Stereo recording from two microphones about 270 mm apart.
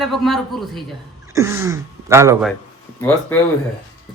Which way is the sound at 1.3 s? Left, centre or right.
Centre.